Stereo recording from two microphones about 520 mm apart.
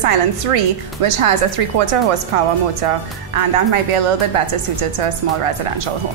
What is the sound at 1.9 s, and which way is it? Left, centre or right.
Speech, right.